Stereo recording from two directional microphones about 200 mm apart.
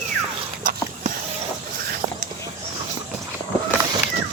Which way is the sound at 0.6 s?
45° right (ahead or behind).